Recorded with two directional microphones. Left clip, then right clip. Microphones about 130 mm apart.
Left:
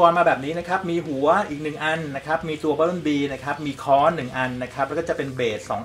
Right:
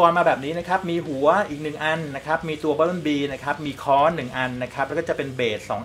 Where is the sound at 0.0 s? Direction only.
20° right (ahead or behind).